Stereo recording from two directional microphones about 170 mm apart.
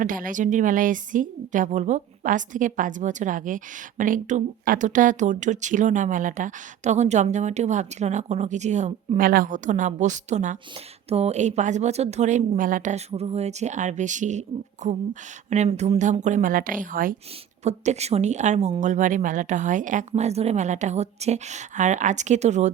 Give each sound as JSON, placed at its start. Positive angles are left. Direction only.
{"t": 0.0, "sound": "a woman's voice", "side_deg": -50}
{"t": 17.6, "sound": "a woman's voice", "side_deg": -40}